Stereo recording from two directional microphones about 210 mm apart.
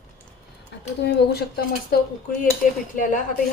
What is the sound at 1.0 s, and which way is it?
Speech, 50° left (ahead or behind).